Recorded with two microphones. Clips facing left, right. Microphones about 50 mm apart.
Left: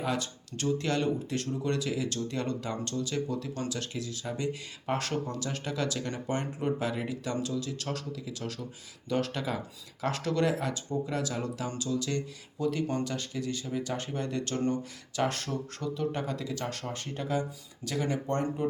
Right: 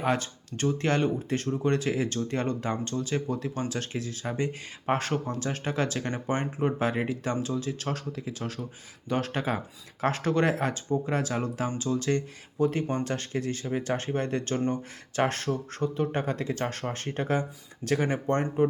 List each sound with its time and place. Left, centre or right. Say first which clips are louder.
0.0 s speech: right 4 dB; right